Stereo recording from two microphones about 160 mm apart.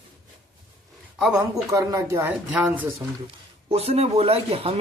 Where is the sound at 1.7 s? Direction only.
20° right (ahead or behind).